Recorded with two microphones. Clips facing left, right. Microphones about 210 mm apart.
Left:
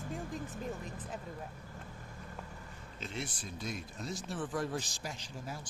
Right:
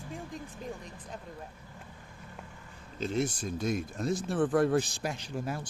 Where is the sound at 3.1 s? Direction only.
45° right (ahead or behind).